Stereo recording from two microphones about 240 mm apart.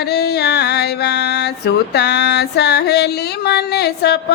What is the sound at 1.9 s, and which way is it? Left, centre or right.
Speech, left.